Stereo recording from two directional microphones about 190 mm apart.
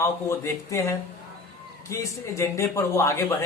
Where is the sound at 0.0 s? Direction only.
15° left (ahead or behind).